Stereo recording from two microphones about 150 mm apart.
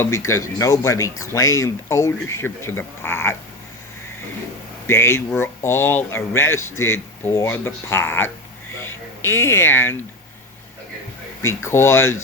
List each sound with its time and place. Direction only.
0.0 s speech: 20° left (ahead or behind)
4.9 s speech: 15° left (ahead or behind)
8.8 s a sound: 15° left (ahead or behind)
11.4 s speech: 15° left (ahead or behind)